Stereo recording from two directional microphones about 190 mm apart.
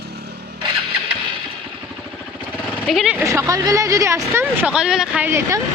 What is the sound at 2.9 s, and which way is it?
Speech, centre (ahead or behind).